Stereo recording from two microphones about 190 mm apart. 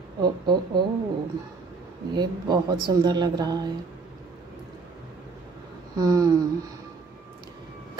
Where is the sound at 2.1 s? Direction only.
20° right (ahead or behind).